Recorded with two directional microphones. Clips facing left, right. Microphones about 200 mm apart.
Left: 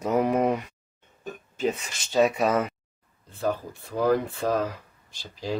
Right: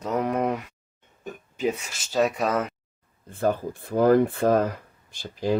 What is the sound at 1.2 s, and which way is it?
Speech, 15° right (ahead or behind).